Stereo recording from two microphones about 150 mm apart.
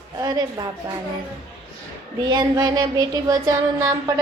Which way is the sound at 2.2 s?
25° right (ahead or behind).